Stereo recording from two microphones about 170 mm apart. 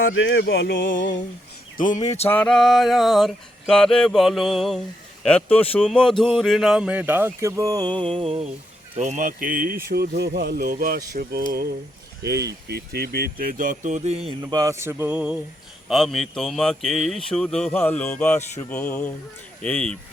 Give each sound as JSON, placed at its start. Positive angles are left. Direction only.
{"t": 0.1, "sound": "a sound", "side_deg": 90}
{"t": 1.7, "sound": "speech", "side_deg": 50}
{"t": 2.3, "sound": "speech", "side_deg": 5}
{"t": 8.1, "sound": "mantra", "side_deg": -35}
{"t": 9.0, "sound": "speech", "side_deg": -45}
{"t": 14.4, "sound": "speech", "side_deg": -20}